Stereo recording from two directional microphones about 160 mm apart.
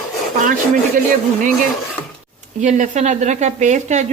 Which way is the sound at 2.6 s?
50° right (ahead or behind).